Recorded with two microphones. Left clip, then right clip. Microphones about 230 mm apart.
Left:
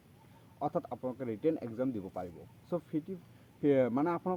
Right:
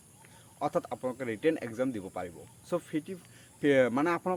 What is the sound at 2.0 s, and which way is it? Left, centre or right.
Speech, centre.